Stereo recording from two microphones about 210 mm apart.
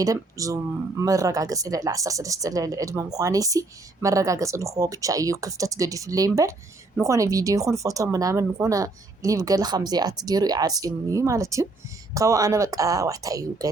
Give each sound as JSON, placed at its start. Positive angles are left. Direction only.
{"t": 0.0, "sound": "speech", "side_deg": -15}